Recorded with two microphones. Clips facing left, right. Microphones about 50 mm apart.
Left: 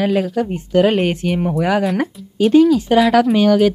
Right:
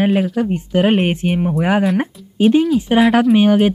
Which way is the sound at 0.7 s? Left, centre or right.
Centre.